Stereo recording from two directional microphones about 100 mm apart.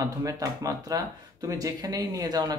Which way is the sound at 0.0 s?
35° right (ahead or behind).